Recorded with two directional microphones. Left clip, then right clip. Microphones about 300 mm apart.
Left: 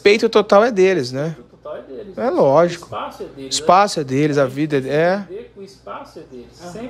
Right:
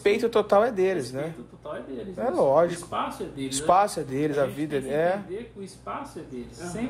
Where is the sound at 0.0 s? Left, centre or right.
Left.